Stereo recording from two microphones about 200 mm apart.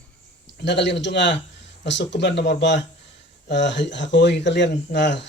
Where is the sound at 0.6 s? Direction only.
60° left (ahead or behind).